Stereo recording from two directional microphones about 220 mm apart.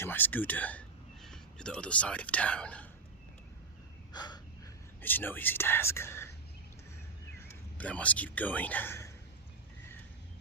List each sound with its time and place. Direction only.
0.0 s speech: 10° left (ahead or behind)
4.1 s a sound: 20° left (ahead or behind)
5.0 s speech: 10° left (ahead or behind)
7.3 s speech: 5° left (ahead or behind)